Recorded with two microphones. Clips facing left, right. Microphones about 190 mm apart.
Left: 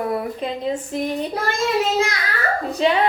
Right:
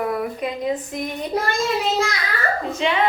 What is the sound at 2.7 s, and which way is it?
Speech, 35° left (ahead or behind).